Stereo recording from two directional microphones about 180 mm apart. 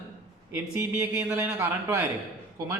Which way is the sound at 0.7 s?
15° right (ahead or behind).